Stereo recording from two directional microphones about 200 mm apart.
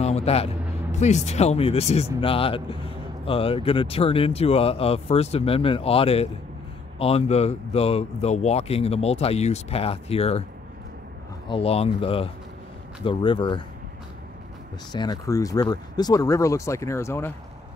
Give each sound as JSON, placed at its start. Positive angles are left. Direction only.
{"t": 0.0, "sound": "vehicle", "side_deg": 30}
{"t": 0.9, "sound": "speech", "side_deg": 35}
{"t": 11.4, "sound": "speech", "side_deg": 25}
{"t": 14.9, "sound": "speech", "side_deg": 20}